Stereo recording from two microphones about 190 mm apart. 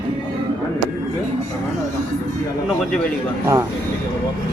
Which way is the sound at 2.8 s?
5° left (ahead or behind).